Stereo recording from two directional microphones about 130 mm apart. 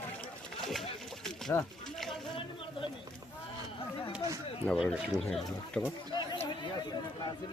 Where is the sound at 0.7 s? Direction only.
Centre (ahead or behind).